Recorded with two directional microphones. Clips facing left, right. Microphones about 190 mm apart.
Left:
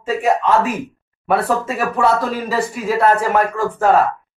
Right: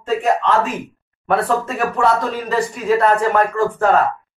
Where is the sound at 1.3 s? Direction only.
5° left (ahead or behind).